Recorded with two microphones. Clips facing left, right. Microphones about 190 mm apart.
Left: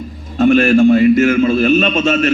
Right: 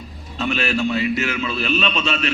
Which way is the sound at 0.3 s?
50° left (ahead or behind).